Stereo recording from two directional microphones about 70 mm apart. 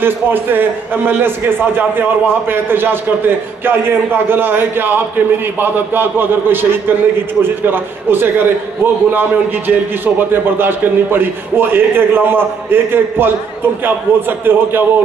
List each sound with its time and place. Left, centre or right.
0.0 s a man's voice: right
14.4 s a man's voice: right